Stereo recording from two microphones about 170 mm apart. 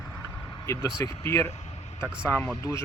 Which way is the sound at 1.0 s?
15° left (ahead or behind).